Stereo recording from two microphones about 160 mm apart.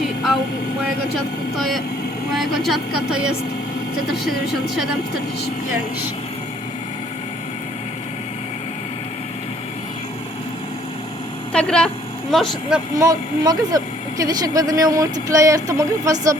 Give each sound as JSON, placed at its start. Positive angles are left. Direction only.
{"t": 1.5, "sound": "speech", "side_deg": 0}
{"t": 11.5, "sound": "speech", "side_deg": 5}
{"t": 13.0, "sound": "speech", "side_deg": -25}